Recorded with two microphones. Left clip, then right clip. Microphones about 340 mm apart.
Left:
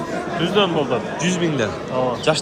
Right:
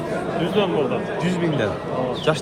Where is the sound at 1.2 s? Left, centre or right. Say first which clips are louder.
Left 2 dB; centre.